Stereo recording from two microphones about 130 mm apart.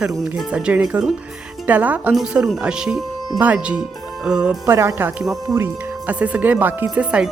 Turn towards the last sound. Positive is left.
turn(degrees=-10)  # may be behind; listen again after turning